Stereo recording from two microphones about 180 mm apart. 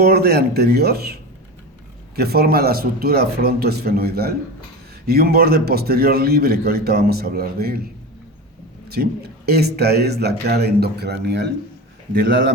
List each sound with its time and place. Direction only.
0.0 s a man's voice: 60° right (ahead or behind)
8.9 s a man's voice: 60° right (ahead or behind)